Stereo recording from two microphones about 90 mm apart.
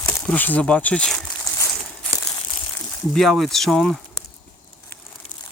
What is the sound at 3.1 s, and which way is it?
Speech, 5° left (ahead or behind).